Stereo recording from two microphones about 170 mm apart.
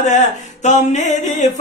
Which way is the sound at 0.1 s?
45° left (ahead or behind).